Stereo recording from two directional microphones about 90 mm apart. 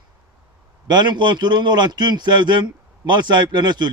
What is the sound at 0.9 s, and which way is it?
A man's voice, 55° right (ahead or behind).